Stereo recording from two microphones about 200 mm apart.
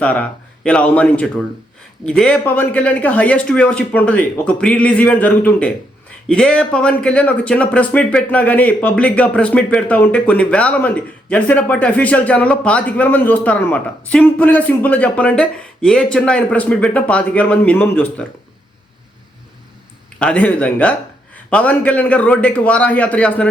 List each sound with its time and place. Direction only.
0.0 s speech: 5° left (ahead or behind)
20.1 s speech: 5° left (ahead or behind)